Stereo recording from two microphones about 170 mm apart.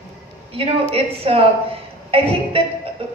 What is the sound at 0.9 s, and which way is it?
A woman's voice, 35° right (ahead or behind).